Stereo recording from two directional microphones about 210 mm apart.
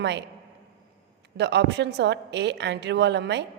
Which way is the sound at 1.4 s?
55° right (ahead or behind).